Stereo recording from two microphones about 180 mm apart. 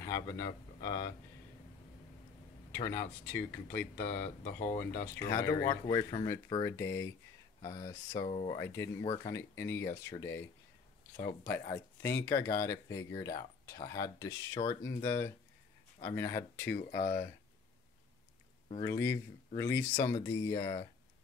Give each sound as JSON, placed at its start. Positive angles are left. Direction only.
{"t": 0.0, "sound": "speech", "side_deg": 15}
{"t": 2.7, "sound": "speech", "side_deg": 10}
{"t": 6.6, "sound": "speech", "side_deg": 15}
{"t": 8.3, "sound": "speech", "side_deg": 35}
{"t": 8.5, "sound": "speech", "side_deg": 15}
{"t": 11.7, "sound": "speech", "side_deg": 15}
{"t": 16.9, "sound": "speech", "side_deg": 55}
{"t": 18.8, "sound": "speech", "side_deg": 15}